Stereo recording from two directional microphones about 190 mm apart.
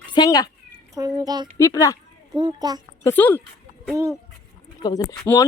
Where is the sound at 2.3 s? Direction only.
20° right (ahead or behind).